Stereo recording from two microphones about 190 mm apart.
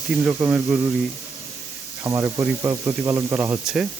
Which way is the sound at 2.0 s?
15° right (ahead or behind).